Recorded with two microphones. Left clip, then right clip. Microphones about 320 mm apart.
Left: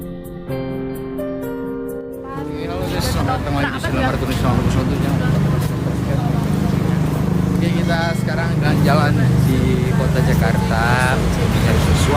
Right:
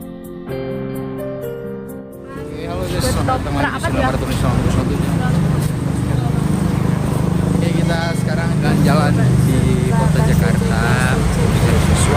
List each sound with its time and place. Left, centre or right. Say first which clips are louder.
7.6 s speech: left 1 dB; centre
10.4 s speech: left 1 dB; centre